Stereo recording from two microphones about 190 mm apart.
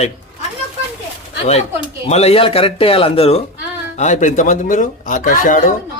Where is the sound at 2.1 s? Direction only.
35° left (ahead or behind).